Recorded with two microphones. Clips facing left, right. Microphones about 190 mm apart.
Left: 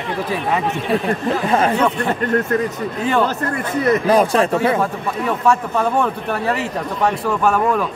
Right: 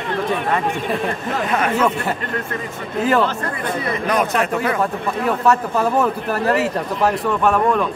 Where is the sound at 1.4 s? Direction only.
30° left (ahead or behind).